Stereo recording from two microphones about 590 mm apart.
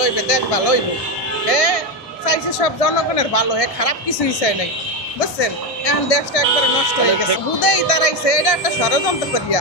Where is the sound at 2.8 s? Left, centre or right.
Left.